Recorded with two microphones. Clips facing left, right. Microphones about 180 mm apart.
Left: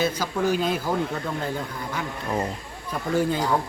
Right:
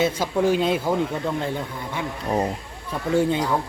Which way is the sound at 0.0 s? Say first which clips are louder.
Right 3 dB; 25° right (ahead or behind).